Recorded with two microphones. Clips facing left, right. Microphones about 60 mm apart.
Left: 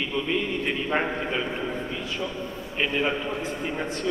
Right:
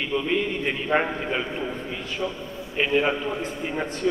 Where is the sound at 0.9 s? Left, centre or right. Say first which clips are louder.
Right 4 dB; centre.